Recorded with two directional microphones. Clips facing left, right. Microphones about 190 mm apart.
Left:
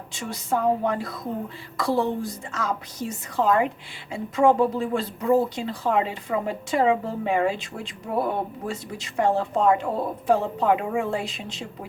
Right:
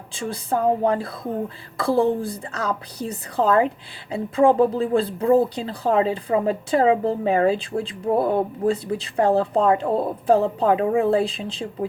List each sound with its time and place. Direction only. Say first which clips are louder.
0.1 s speech: right 2 dB; 30° right (ahead or behind)